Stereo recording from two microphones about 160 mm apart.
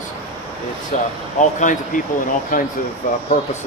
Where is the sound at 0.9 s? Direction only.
50° left (ahead or behind).